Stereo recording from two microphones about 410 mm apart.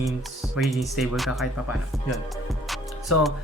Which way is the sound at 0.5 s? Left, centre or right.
Centre.